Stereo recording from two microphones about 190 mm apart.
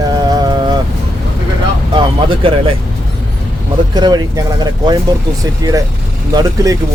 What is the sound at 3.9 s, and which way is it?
Speech, 20° right (ahead or behind).